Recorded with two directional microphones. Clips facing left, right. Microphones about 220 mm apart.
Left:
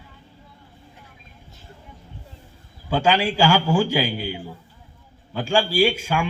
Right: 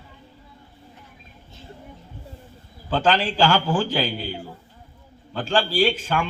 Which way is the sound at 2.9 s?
10° left (ahead or behind).